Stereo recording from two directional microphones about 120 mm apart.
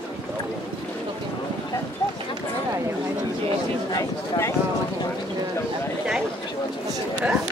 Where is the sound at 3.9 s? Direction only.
25° left (ahead or behind).